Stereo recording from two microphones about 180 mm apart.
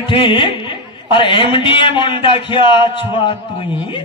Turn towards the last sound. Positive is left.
turn(degrees=30)  # may be behind; listen again after turning